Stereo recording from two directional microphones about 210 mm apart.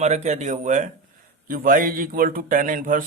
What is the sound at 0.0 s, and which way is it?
A man's voice, 30° right (ahead or behind).